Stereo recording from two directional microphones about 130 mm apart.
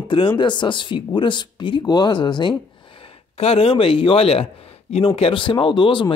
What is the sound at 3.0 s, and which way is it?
A woman's voice, 50° left (ahead or behind).